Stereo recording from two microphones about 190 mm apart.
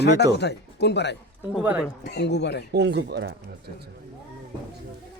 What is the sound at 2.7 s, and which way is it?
Speech, 65° right (ahead or behind).